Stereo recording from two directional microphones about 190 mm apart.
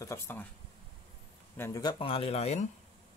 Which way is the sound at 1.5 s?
15° left (ahead or behind).